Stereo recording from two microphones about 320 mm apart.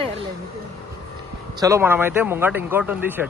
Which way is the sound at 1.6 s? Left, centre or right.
Centre.